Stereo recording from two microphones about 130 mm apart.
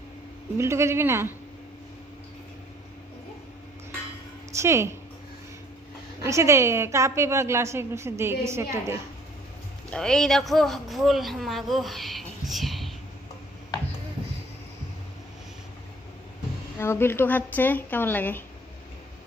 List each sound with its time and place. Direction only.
0.6 s a woman's voice: 20° right (ahead or behind)
4.5 s a woman's voice: 20° right (ahead or behind)
6.2 s a woman's voice: 25° right (ahead or behind)
9.9 s speech: 5° left (ahead or behind)
16.7 s speech: 20° left (ahead or behind)